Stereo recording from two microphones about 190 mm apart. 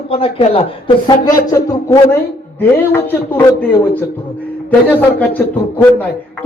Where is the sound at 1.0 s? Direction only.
20° left (ahead or behind).